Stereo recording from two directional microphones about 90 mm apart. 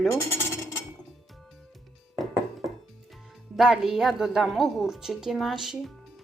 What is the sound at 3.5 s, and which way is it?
Speech, 5° right (ahead or behind).